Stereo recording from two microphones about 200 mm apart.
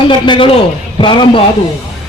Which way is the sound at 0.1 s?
25° left (ahead or behind).